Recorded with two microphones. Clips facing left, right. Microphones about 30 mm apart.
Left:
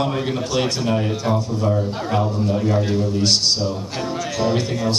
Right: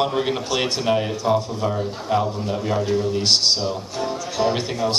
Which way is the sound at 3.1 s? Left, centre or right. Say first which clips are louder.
Even; centre.